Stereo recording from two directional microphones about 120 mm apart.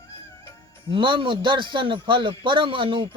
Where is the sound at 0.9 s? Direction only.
45° right (ahead or behind).